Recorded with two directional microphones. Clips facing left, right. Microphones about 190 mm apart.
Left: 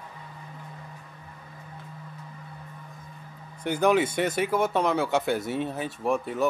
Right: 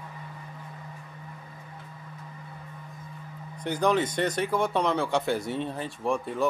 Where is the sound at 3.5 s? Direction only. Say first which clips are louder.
Left 2 dB; 5° left (ahead or behind).